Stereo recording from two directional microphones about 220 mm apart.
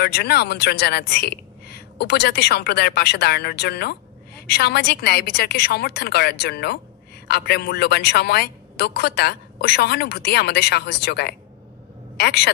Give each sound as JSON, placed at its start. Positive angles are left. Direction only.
{"t": 0.0, "sound": "a woman's voice", "side_deg": 45}